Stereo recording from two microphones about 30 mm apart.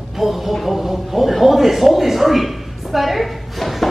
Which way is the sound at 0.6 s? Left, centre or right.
Centre.